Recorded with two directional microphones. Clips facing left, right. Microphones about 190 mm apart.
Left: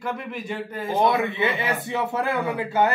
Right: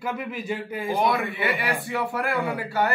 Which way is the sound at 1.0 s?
25° left (ahead or behind).